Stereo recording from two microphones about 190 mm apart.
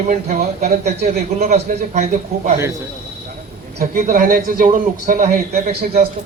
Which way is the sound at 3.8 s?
45° right (ahead or behind).